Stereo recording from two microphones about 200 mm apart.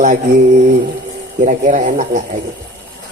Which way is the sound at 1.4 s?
40° right (ahead or behind).